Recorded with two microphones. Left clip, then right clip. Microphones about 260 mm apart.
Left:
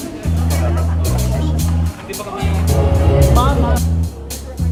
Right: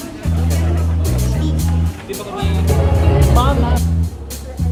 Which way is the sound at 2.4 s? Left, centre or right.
Centre.